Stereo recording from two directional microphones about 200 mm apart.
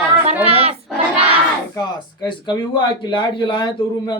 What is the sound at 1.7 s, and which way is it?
Speech, 20° left (ahead or behind).